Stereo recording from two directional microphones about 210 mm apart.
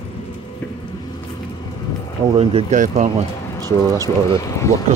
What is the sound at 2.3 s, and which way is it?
Speech, 30° right (ahead or behind).